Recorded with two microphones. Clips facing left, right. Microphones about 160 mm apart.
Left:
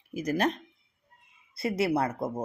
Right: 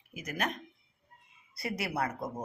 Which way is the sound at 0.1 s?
35° left (ahead or behind).